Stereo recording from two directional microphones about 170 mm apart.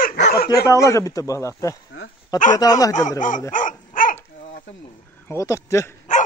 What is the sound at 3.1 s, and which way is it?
Speech, 50° left (ahead or behind).